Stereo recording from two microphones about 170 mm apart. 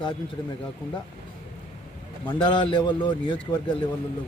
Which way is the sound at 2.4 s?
30° left (ahead or behind).